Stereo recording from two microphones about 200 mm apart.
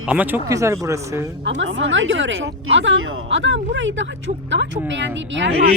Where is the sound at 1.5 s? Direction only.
65° right (ahead or behind).